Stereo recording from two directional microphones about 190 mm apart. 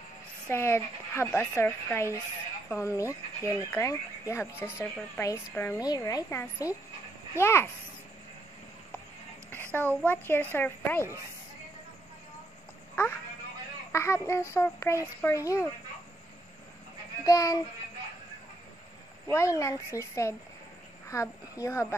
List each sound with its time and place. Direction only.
0.5 s speech: 15° left (ahead or behind)
10.0 s speech: 10° left (ahead or behind)
13.0 s a woman's voice: 10° left (ahead or behind)
17.2 s speech: 20° left (ahead or behind)
19.2 s speech: 15° left (ahead or behind)